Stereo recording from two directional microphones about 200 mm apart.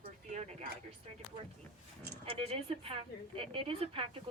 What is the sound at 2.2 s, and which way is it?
A woman's voice, 30° right (ahead or behind).